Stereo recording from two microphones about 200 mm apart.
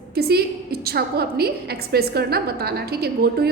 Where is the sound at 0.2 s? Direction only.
50° right (ahead or behind).